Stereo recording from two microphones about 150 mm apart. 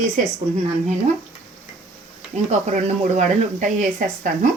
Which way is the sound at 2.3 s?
50° right (ahead or behind).